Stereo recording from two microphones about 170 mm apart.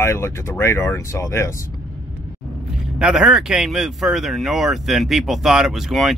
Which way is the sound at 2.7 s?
5° right (ahead or behind).